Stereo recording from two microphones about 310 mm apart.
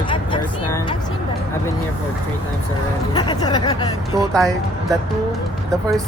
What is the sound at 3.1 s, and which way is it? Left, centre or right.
Speech, centre.